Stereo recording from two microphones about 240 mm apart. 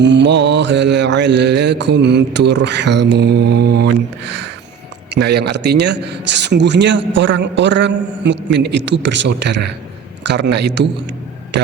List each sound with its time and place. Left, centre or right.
0.0 s speech: right